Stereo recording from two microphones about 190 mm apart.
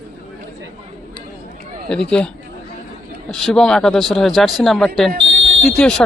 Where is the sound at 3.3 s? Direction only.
5° left (ahead or behind).